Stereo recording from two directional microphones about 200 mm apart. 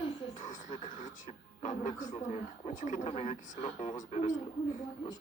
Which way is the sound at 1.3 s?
35° left (ahead or behind).